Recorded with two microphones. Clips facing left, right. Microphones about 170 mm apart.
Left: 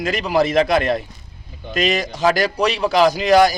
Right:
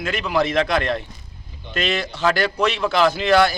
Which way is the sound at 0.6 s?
10° left (ahead or behind).